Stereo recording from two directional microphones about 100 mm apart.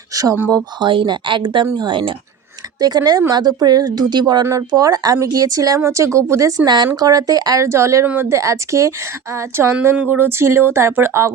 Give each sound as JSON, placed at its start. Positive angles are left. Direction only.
{"t": 0.1, "sound": "a sound", "side_deg": -35}
{"t": 0.5, "sound": "speech", "side_deg": -55}
{"t": 2.8, "sound": "a woman's voice", "side_deg": -40}
{"t": 6.7, "sound": "a woman's voice", "side_deg": -45}
{"t": 8.0, "sound": "speech", "side_deg": -20}
{"t": 8.3, "sound": "a woman's voice", "side_deg": -30}